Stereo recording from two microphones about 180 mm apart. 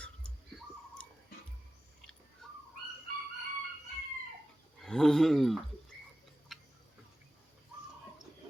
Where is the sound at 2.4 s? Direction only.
5° left (ahead or behind).